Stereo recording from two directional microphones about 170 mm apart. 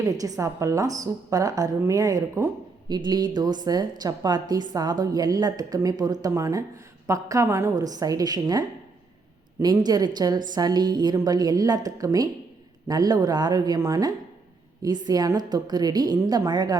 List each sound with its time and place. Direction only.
0.0 s a woman's voice: 20° right (ahead or behind)